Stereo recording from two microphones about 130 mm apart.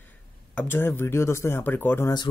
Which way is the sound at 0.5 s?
15° left (ahead or behind).